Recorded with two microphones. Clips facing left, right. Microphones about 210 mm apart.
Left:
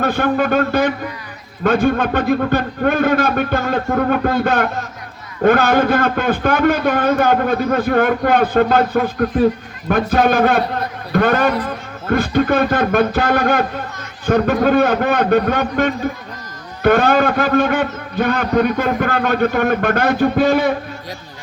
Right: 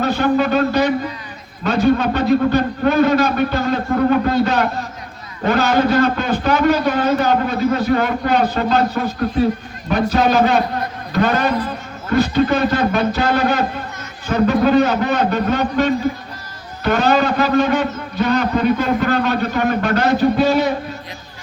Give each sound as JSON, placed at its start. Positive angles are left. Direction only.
{"t": 0.0, "sound": "a man's voice", "side_deg": 55}